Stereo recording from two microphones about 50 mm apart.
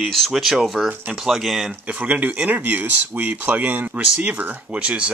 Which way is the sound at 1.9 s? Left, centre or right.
Right.